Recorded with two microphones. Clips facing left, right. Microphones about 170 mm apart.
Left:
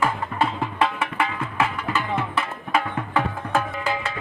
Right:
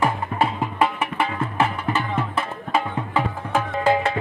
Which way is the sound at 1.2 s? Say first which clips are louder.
Right 2 dB; 30° right (ahead or behind).